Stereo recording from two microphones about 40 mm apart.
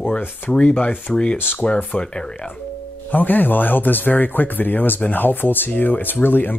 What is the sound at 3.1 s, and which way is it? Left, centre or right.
Speech, left.